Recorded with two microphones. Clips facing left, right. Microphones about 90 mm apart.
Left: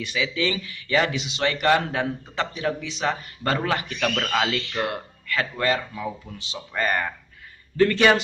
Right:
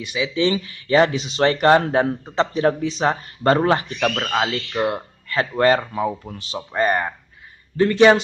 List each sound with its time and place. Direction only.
0.0 s speech: 20° right (ahead or behind); by 3.8 s 35° right (ahead or behind)
4.0 s speech: 20° right (ahead or behind); by 6.6 s 45° right (ahead or behind)
6.7 s speech: 25° right (ahead or behind)